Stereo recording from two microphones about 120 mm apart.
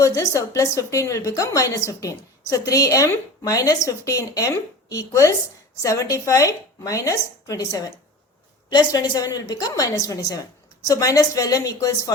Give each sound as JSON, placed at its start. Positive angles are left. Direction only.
{"t": 0.0, "sound": "a woman's voice", "side_deg": 25}